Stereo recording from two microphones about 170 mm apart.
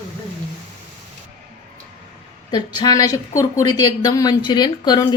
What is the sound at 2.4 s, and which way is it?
Speech, 25° left (ahead or behind).